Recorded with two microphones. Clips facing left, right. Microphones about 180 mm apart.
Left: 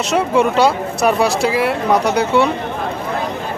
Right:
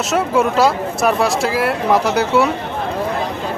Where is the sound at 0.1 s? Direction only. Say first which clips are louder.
Left 1 dB; centre (ahead or behind).